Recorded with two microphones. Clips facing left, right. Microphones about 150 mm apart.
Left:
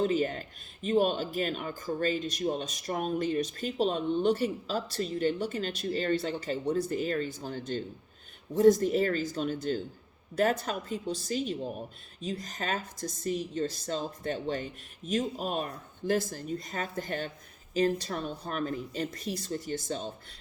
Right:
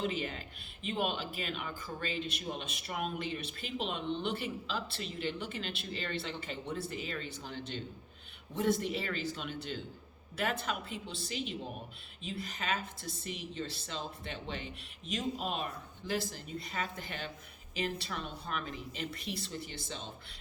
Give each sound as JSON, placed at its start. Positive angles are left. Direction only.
{"t": 0.0, "sound": "a woman's voice", "side_deg": 40}